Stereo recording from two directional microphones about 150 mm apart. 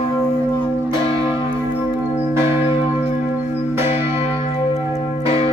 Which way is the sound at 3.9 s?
40° left (ahead or behind).